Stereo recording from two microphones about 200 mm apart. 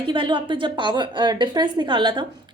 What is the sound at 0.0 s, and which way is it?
A woman's voice, 25° right (ahead or behind).